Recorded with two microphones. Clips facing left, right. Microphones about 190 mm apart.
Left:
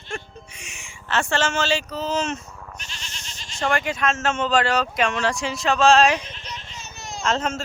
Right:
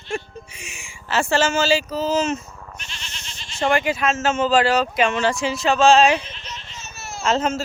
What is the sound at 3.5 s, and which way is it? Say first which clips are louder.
Speech: right 4 dB; 5° right (ahead or behind).